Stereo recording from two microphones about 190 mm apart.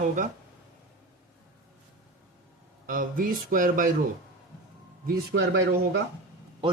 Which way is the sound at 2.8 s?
45° right (ahead or behind).